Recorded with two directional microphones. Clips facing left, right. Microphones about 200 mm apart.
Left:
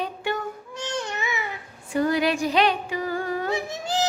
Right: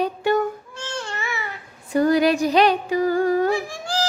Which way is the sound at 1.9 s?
40° right (ahead or behind).